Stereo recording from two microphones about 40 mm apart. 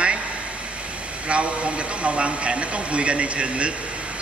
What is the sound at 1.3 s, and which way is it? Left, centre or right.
Speech, right.